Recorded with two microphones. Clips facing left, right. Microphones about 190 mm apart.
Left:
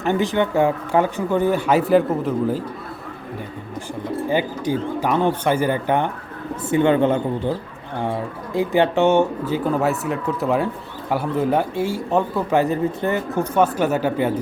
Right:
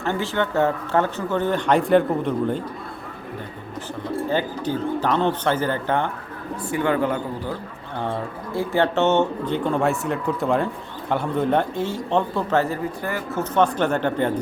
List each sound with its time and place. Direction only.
0.0 s speech: 15° left (ahead or behind)
4.3 s speech: 10° left (ahead or behind)